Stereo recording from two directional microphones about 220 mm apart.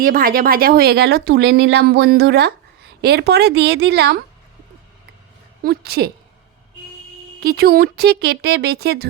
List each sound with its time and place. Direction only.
0.0 s speech: 40° right (ahead or behind)
5.6 s speech: 45° right (ahead or behind)
7.3 s speech: 45° right (ahead or behind)